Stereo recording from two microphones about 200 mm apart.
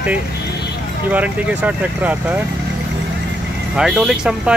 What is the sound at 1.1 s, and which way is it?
Speech, 5° right (ahead or behind).